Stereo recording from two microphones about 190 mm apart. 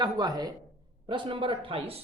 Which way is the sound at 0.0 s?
20° right (ahead or behind).